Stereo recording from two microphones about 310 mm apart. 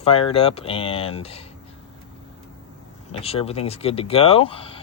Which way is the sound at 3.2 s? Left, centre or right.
Centre.